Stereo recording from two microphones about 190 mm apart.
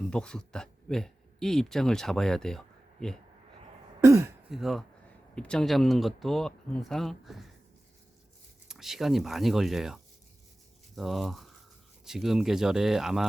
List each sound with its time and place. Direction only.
0.1 s speech: 5° left (ahead or behind)
4.0 s speech: 15° right (ahead or behind)
4.4 s speech: centre (ahead or behind)
8.6 s speech: centre (ahead or behind)